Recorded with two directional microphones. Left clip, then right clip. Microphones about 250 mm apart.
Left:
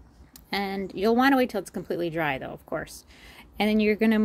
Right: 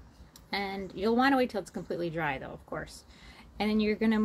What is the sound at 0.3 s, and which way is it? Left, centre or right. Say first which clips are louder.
Speech: left 4 dB; left.